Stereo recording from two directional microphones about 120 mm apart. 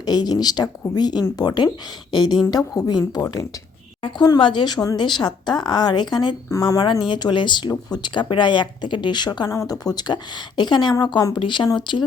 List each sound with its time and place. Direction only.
0.0 s a woman's voice: 35° left (ahead or behind)
4.0 s a woman's voice: 40° left (ahead or behind)